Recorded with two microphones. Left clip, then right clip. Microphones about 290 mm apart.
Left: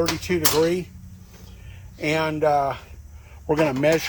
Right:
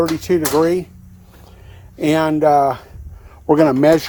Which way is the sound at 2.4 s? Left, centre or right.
Right.